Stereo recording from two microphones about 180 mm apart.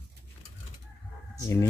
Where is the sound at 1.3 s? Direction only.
15° left (ahead or behind).